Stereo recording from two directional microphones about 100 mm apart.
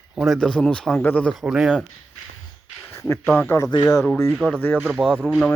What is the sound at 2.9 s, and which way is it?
Speech, 20° left (ahead or behind).